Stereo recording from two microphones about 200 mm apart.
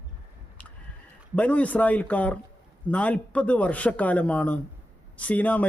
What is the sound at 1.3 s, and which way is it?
A man's voice, 5° left (ahead or behind).